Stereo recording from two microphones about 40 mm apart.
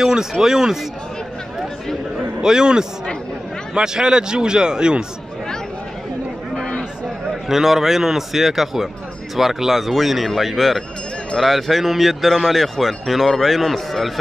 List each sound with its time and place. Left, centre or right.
0.0 s a man's voice: centre
2.4 s a man's voice: centre
7.4 s a man's voice: centre